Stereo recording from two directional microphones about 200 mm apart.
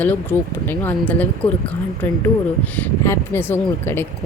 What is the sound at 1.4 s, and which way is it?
Speech, 30° left (ahead or behind).